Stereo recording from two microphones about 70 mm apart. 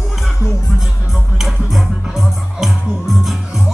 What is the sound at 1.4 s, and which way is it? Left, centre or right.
Music, centre.